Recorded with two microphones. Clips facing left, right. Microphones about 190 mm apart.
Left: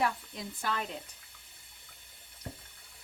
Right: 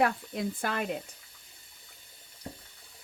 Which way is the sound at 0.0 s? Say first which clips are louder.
Right 5 dB; 55° right (ahead or behind).